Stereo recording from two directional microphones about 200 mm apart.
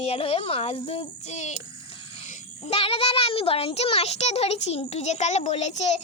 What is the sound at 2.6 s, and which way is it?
A child's voice, 30° left (ahead or behind).